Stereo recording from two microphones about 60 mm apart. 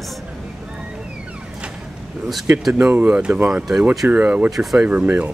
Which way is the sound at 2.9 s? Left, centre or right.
Right.